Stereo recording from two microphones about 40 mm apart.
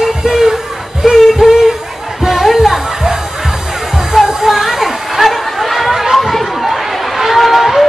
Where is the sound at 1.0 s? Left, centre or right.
Centre.